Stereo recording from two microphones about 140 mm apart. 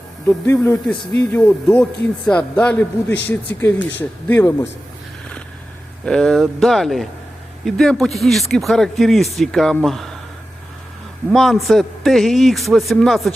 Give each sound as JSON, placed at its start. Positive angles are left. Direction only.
{"t": 0.3, "sound": "speech", "side_deg": 15}
{"t": 6.1, "sound": "speech", "side_deg": 5}
{"t": 11.3, "sound": "speech", "side_deg": 0}